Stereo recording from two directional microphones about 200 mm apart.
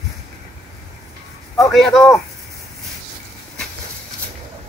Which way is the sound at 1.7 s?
Centre (ahead or behind).